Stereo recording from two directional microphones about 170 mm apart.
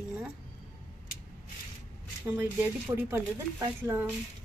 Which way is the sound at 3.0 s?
15° right (ahead or behind).